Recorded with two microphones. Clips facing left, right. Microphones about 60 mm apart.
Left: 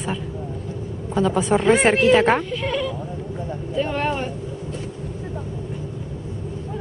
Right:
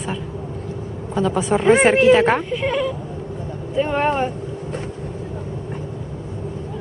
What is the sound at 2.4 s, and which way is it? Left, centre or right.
A woman's voice, right.